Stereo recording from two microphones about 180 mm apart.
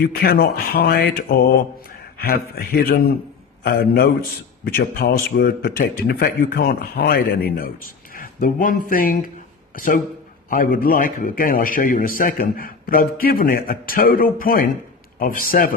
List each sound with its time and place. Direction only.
0.0 s a man's voice: 60° left (ahead or behind)